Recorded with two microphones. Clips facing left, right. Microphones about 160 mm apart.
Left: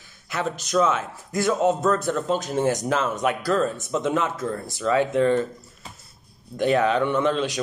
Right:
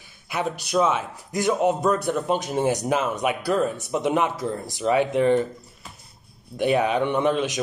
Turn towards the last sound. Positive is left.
turn(degrees=-15)  # may be behind; listen again after turning